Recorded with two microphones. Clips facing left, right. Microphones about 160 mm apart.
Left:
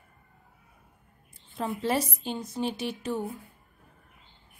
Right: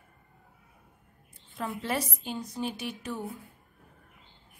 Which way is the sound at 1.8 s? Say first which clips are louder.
Left 5 dB; 30° left (ahead or behind).